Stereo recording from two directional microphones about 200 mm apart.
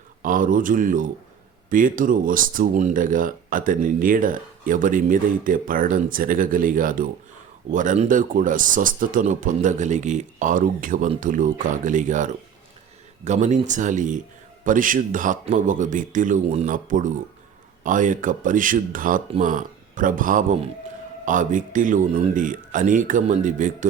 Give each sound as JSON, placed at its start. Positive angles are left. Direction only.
{"t": 0.2, "sound": "speech", "side_deg": -45}